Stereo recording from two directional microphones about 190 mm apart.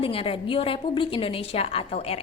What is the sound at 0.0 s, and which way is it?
A woman's voice, 30° left (ahead or behind).